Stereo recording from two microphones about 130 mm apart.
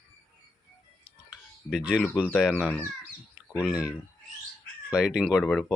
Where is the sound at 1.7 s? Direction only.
5° right (ahead or behind).